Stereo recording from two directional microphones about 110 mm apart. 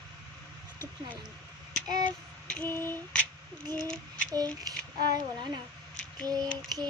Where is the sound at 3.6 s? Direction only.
35° right (ahead or behind).